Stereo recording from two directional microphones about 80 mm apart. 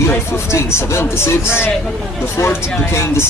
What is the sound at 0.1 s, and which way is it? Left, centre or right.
Speech, left.